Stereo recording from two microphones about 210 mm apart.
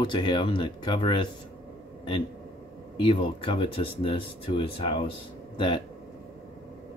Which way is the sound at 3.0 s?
25° left (ahead or behind).